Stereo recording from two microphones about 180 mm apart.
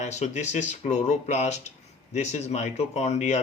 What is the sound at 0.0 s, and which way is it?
Speech, 40° left (ahead or behind).